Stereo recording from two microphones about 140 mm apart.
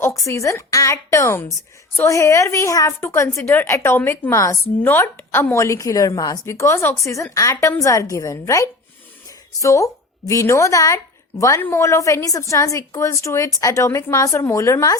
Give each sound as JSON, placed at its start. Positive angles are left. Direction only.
{"t": 0.0, "sound": "a woman's voice", "side_deg": 20}